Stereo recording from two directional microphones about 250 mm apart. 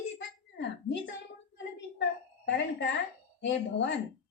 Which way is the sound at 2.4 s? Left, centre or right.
Left.